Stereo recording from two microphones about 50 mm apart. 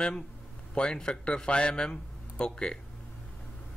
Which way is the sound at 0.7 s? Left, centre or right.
Centre.